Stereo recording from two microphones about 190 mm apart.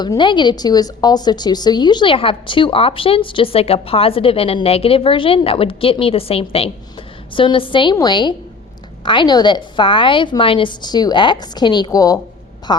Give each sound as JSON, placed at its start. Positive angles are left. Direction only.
{"t": 0.0, "sound": "a woman's voice", "side_deg": 25}